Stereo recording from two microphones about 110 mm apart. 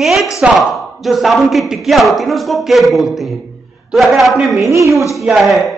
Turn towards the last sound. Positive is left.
turn(degrees=0)  # may be behind; listen again after turning